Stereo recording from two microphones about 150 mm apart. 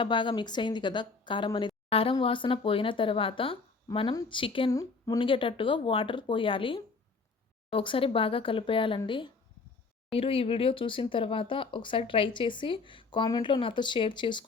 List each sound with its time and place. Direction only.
0.0 s speech: 30° left (ahead or behind)
4.7 s a woman's voice: 20° left (ahead or behind)
5.2 s speech: 35° left (ahead or behind)